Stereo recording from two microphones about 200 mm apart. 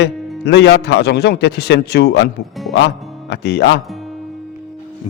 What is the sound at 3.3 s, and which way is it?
Speech, 55° left (ahead or behind).